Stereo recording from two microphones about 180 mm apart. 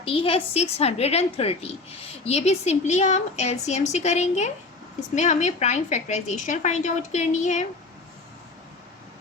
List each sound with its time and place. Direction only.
0.0 s a woman's voice: 30° left (ahead or behind)